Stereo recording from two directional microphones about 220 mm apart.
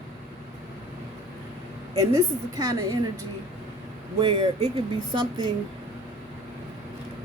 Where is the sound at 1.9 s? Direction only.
15° right (ahead or behind).